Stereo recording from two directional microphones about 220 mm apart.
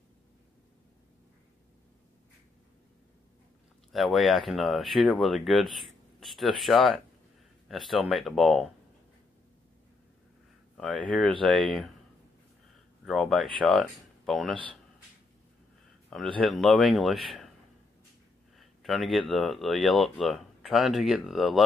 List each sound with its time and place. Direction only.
3.9 s speech: centre (ahead or behind)
10.8 s speech: 5° left (ahead or behind)
13.0 s speech: centre (ahead or behind)
16.1 s speech: 5° left (ahead or behind)
18.6 s speech: centre (ahead or behind)